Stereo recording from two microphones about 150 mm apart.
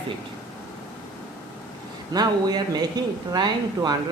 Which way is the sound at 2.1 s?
25° right (ahead or behind).